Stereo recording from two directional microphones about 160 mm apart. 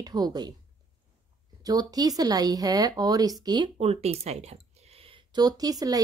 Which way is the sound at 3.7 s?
40° right (ahead or behind).